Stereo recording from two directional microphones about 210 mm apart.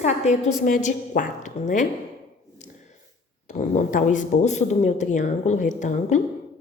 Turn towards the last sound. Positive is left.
turn(degrees=35)  # may be behind; listen again after turning